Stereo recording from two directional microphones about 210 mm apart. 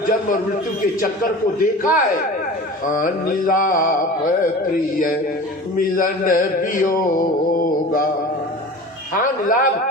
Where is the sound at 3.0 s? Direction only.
40° left (ahead or behind).